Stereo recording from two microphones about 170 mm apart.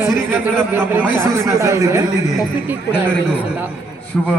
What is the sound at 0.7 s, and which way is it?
A man's voice, 10° right (ahead or behind).